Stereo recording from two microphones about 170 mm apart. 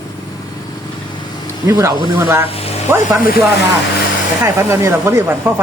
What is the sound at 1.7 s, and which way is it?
Speech, 20° right (ahead or behind).